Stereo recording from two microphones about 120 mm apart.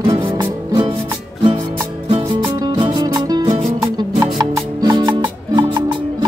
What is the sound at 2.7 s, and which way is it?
Music, 45° right (ahead or behind).